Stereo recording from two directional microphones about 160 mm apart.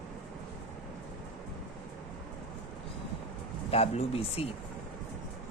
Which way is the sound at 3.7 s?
40° left (ahead or behind).